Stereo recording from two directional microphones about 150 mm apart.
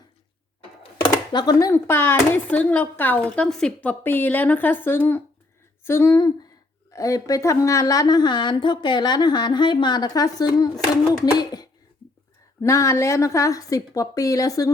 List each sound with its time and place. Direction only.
1.3 s a woman's voice: 30° left (ahead or behind)